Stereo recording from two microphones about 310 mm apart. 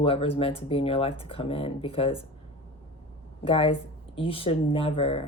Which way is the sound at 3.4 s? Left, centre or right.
Centre.